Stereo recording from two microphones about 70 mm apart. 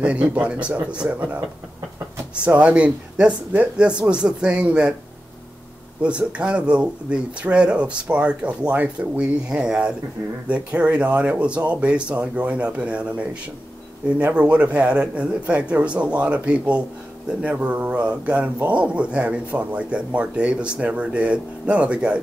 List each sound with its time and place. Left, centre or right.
0.0 s speech: centre
2.4 s speech: centre
6.0 s speech: centre